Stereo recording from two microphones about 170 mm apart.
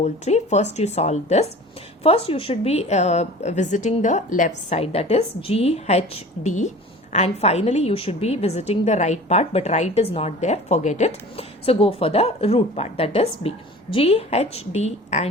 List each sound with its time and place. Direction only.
0.0 s a woman's voice: 40° left (ahead or behind)